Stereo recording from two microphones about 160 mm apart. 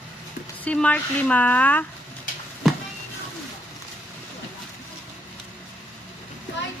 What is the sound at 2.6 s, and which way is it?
Music, centre (ahead or behind).